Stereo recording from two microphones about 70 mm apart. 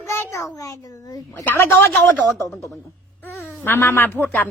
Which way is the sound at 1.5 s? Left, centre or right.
Left.